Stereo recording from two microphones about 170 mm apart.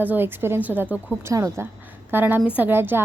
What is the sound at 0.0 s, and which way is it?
A woman's voice, 10° right (ahead or behind).